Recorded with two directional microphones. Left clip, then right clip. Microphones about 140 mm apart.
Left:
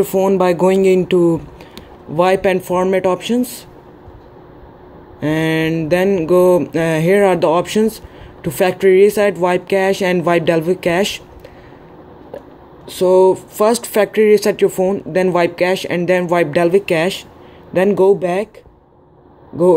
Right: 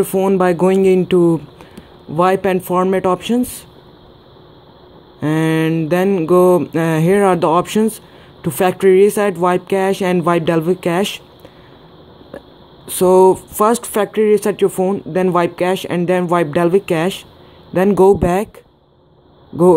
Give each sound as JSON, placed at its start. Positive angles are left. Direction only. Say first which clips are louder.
{"t": 0.0, "sound": "mantra", "louder": "left 1 dB", "side_deg": -25}
{"t": 5.2, "sound": "mantra", "louder": "even", "side_deg": -25}
{"t": 12.9, "sound": "mantra", "louder": "right 1 dB", "side_deg": -40}
{"t": 17.7, "sound": "speech", "louder": "right 1 dB", "side_deg": -35}